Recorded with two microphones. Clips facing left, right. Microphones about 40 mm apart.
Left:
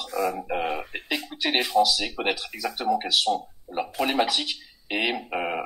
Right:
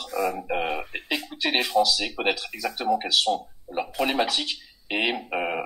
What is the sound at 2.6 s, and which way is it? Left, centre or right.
Speech, centre.